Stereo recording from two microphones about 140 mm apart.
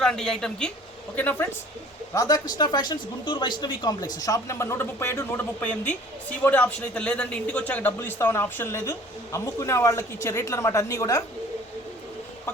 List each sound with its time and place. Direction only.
0.0 s a woman's voice: 5° left (ahead or behind)
2.1 s speech: 25° left (ahead or behind)